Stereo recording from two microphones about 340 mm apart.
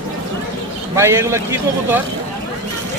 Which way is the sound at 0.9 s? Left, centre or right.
Centre.